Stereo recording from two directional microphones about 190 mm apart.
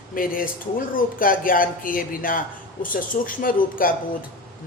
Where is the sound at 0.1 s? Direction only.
45° left (ahead or behind).